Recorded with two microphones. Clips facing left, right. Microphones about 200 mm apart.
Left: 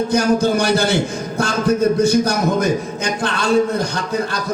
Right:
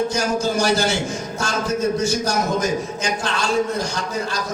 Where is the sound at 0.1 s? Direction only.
60° left (ahead or behind).